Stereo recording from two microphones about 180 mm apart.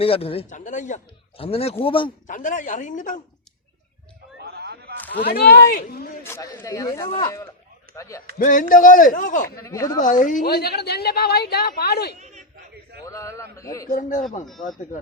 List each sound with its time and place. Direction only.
0.0 s speech: 30° left (ahead or behind)
2.2 s a woman's voice: 45° left (ahead or behind)
4.5 s a sound: 65° right (ahead or behind)
5.2 s a woman's voice: 60° left (ahead or behind)
6.2 s speech: 15° left (ahead or behind)
8.4 s a woman's voice: 50° left (ahead or behind)
9.6 s speech: 15° left (ahead or behind)
10.0 s a woman's voice: 45° left (ahead or behind); by 12.1 s 65° left (ahead or behind)
12.5 s a sound: 65° right (ahead or behind)
13.1 s speech: 15° left (ahead or behind)
13.9 s a woman's voice: 45° left (ahead or behind)
14.4 s speech: centre (ahead or behind)